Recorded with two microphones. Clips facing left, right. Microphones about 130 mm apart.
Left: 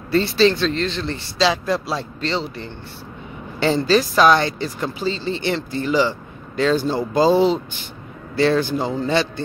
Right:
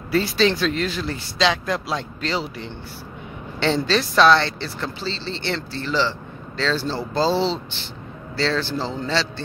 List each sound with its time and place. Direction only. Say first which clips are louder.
0.1 s a woman's voice: left 3 dB; centre (ahead or behind); by 9.3 s 15° left (ahead or behind)